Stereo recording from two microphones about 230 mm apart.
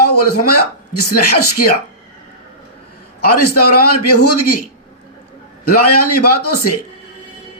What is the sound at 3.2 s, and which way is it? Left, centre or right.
Speech, left.